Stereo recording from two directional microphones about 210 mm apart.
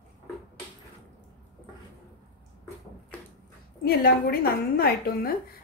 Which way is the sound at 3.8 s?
45° left (ahead or behind).